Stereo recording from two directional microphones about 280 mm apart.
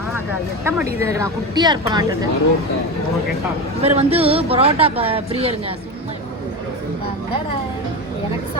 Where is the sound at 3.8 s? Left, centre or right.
Right.